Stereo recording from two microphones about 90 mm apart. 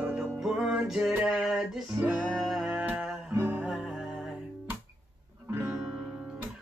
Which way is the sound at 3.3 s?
25° right (ahead or behind).